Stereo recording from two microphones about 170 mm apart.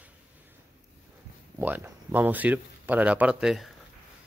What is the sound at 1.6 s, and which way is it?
Speech, 10° right (ahead or behind).